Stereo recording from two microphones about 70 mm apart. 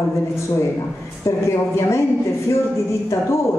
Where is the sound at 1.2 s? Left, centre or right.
Left.